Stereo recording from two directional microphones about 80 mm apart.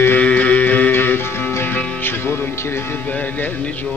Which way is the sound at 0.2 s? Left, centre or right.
Centre.